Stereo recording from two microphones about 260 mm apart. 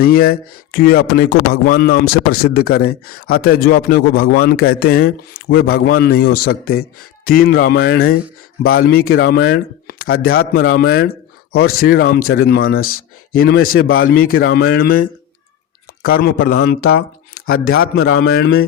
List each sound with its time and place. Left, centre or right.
0.0 s speech: left
12.8 s speech: left
13.3 s speech: left
13.8 s speech: left
14.1 s speech: left
16.0 s speech: left